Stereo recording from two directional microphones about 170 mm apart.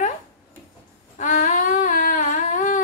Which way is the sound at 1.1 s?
45° left (ahead or behind).